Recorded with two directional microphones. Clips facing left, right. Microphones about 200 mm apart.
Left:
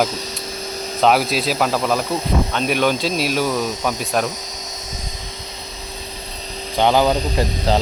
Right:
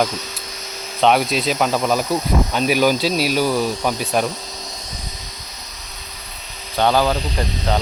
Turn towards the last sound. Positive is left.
turn(degrees=30)  # may be behind; listen again after turning